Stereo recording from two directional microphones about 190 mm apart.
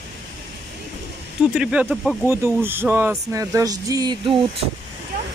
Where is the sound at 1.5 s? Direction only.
5° right (ahead or behind); by 4.4 s 25° right (ahead or behind).